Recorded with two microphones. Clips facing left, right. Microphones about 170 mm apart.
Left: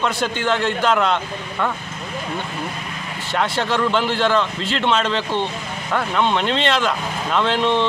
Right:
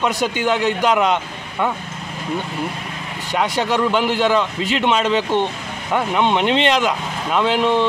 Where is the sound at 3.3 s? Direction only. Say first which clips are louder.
Right 2 dB; 15° right (ahead or behind).